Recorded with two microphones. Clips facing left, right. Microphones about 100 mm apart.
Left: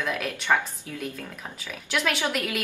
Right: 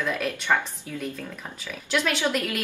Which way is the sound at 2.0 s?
15° left (ahead or behind).